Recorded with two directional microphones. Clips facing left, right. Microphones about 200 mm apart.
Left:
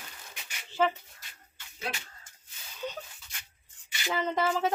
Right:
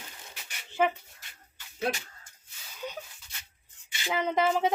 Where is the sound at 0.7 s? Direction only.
15° right (ahead or behind).